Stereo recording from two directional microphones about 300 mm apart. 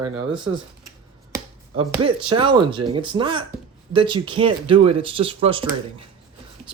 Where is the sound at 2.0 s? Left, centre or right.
Centre.